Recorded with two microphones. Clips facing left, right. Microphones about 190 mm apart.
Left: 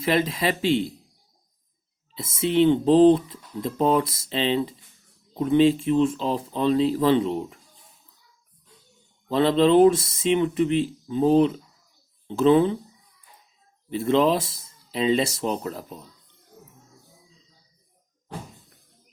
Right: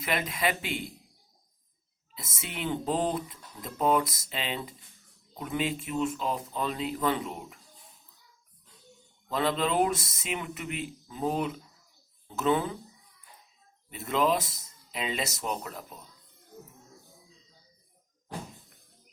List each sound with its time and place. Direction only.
0.0 s speech: 30° left (ahead or behind)
2.1 s speech: 30° left (ahead or behind)
9.3 s speech: 30° left (ahead or behind)
13.9 s speech: 30° left (ahead or behind)